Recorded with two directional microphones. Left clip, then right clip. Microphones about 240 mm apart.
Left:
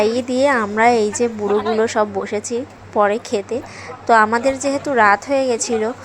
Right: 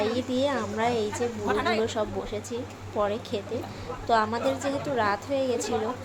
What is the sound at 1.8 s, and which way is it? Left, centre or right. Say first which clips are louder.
A woman's voice: left 11 dB; left.